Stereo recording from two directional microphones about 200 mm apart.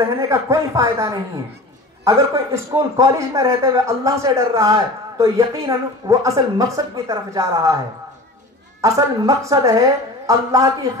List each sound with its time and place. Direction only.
0.0 s a man's voice: 15° right (ahead or behind)
8.8 s a man's voice: 15° right (ahead or behind)